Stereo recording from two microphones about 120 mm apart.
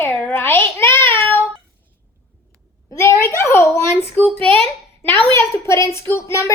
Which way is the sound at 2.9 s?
20° left (ahead or behind).